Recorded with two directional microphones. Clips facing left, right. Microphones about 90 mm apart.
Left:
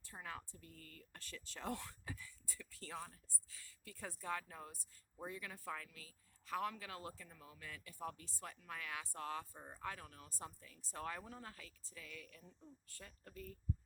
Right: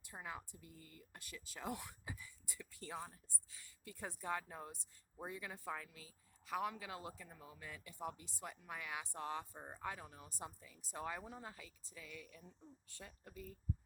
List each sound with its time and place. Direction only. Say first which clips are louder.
0.0 s speech: right 1 dB; 15° right (ahead or behind)